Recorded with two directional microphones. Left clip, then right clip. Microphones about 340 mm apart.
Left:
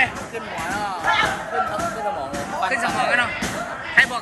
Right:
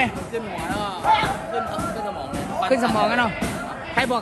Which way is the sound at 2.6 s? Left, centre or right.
Centre.